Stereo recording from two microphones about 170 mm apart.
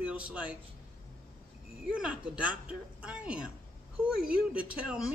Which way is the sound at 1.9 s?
5° right (ahead or behind).